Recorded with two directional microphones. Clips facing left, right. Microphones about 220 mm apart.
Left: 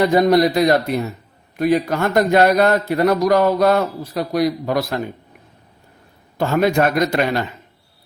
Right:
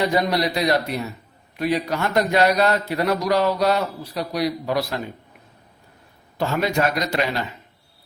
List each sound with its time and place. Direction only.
0.0 s a man's voice: 50° left (ahead or behind)
6.3 s a man's voice: 50° left (ahead or behind)